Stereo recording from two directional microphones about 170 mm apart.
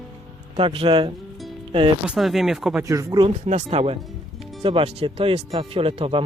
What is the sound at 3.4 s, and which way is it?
Speech, 40° right (ahead or behind).